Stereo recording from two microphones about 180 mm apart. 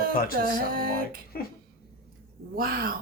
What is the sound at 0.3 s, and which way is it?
Speech, 55° right (ahead or behind).